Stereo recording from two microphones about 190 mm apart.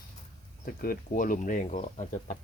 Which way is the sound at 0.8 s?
50° left (ahead or behind).